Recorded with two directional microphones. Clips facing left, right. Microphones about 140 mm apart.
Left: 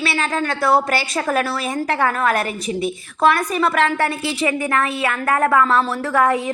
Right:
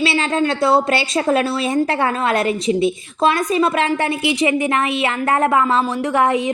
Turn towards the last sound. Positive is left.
turn(degrees=-20)  # may be behind; listen again after turning